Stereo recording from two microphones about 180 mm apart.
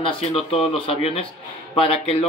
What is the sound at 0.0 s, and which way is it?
Speech, 30° left (ahead or behind).